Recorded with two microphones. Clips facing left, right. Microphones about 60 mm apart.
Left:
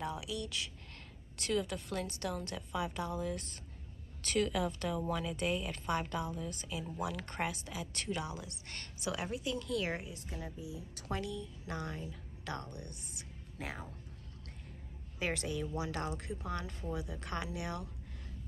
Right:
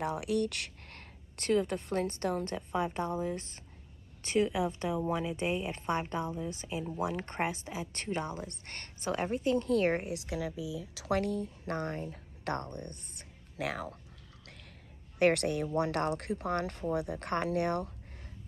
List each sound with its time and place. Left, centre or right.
0.0 s speech: right
10.0 s speech: right
15.1 s speech: right